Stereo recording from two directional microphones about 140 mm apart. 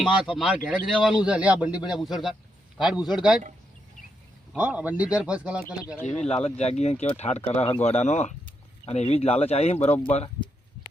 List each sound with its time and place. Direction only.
0.3 s a man's voice: 10° right (ahead or behind)
4.5 s speech: 10° right (ahead or behind)
6.1 s speech: 50° left (ahead or behind)